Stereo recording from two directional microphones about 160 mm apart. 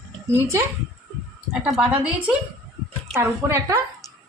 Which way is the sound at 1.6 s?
5° right (ahead or behind).